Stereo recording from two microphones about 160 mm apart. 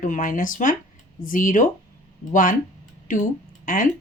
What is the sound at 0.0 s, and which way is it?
Speech, 55° left (ahead or behind).